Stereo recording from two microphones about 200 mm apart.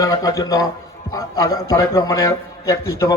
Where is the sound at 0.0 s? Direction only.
20° left (ahead or behind).